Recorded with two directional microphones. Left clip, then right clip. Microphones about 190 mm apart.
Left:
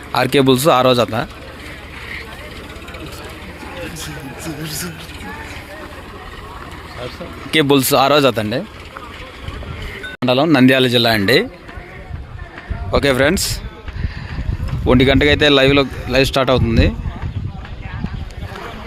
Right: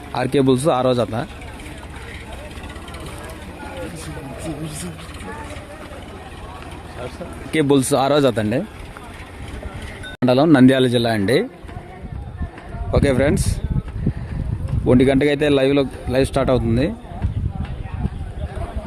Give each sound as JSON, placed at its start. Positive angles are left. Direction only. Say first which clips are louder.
{"t": 0.1, "sound": "a man's voice", "louder": "left 4 dB", "side_deg": 0}
{"t": 7.5, "sound": "a man's voice", "louder": "left 4 dB", "side_deg": -5}
{"t": 10.2, "sound": "speech", "louder": "left 1 dB", "side_deg": -25}
{"t": 10.5, "sound": "a man's voice", "louder": "left 2 dB", "side_deg": -10}
{"t": 12.9, "sound": "a man's voice", "louder": "left 4 dB", "side_deg": -5}
{"t": 14.8, "sound": "a man's voice", "louder": "left 3 dB", "side_deg": -10}